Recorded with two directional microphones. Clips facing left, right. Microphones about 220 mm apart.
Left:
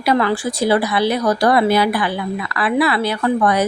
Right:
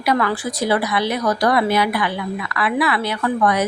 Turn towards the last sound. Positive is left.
turn(degrees=30)  # may be behind; listen again after turning